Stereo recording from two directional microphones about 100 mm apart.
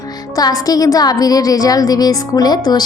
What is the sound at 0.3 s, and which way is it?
A woman's voice, 40° left (ahead or behind).